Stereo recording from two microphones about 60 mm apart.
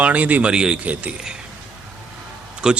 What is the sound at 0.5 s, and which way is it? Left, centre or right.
Speech, centre.